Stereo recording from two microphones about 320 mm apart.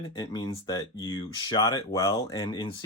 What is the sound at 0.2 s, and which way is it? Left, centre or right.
Speech, centre.